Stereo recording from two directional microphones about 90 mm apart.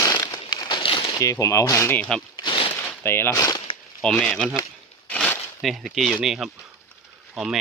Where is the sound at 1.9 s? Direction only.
15° left (ahead or behind).